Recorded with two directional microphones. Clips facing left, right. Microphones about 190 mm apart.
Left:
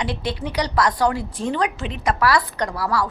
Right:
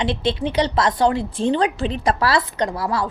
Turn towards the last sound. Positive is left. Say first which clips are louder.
# right 1 dB
turn(degrees=-25)  # may be behind; listen again after turning